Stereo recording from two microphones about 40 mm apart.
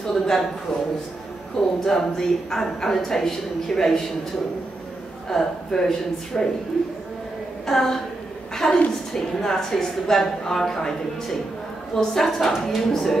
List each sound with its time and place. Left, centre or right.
0.1 s a man's voice: centre
1.6 s speech: left
1.9 s a woman's voice: centre
5.3 s a woman's voice: centre
7.6 s a woman's voice: centre